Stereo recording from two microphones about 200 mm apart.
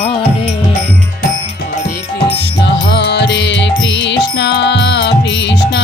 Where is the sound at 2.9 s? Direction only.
60° left (ahead or behind).